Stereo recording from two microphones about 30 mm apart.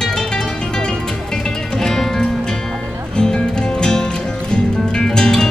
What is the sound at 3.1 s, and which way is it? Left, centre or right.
Music, left.